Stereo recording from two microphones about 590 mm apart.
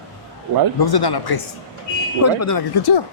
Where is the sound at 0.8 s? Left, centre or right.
Left.